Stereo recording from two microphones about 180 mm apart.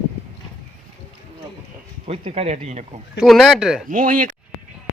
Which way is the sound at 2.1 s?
35° right (ahead or behind).